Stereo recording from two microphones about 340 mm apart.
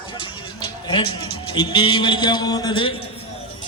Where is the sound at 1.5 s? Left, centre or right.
Centre.